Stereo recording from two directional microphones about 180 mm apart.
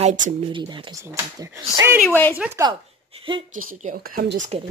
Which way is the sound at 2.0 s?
10° left (ahead or behind).